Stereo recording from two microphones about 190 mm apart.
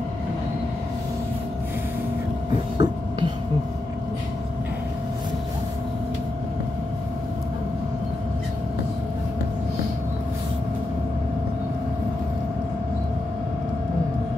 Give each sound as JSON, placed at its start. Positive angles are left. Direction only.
{"t": 2.8, "sound": "hum", "side_deg": -20}